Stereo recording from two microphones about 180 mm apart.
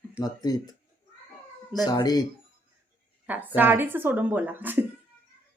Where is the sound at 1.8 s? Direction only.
20° left (ahead or behind).